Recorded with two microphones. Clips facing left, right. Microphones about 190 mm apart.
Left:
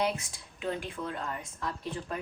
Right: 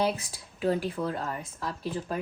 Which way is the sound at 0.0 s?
35° right (ahead or behind).